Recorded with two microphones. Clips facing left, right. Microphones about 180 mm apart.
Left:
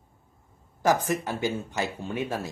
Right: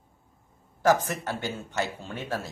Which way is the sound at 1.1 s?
15° left (ahead or behind).